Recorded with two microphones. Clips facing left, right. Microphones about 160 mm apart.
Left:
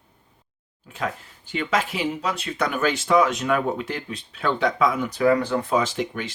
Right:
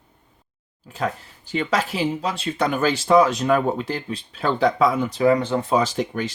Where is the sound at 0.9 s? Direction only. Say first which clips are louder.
Right 3 dB; 35° right (ahead or behind).